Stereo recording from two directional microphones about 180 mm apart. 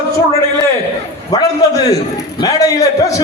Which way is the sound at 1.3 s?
20° left (ahead or behind).